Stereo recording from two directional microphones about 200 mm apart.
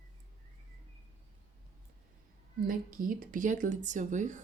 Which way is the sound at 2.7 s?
45° right (ahead or behind).